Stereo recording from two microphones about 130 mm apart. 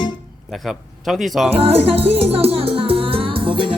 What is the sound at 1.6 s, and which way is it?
Music, 50° right (ahead or behind).